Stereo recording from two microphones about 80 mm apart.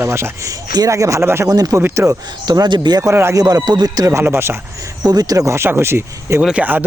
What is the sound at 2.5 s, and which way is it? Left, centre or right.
Speech, right.